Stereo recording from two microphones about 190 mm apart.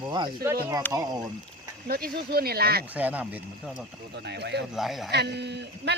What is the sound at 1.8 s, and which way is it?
Speech, 50° right (ahead or behind).